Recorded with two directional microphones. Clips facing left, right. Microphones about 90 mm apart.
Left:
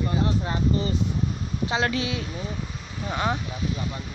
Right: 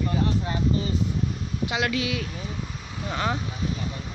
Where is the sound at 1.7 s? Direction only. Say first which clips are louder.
Left 1 dB; 30° left (ahead or behind).